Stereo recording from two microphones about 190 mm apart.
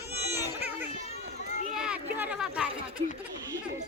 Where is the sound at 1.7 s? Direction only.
5° right (ahead or behind).